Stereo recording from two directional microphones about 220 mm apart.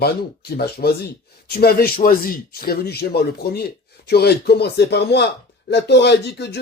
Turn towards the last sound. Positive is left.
turn(degrees=50)  # may be behind; listen again after turning